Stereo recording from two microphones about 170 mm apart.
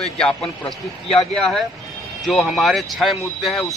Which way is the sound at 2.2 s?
Centre (ahead or behind).